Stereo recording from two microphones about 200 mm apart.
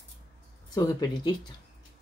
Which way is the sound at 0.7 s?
20° left (ahead or behind).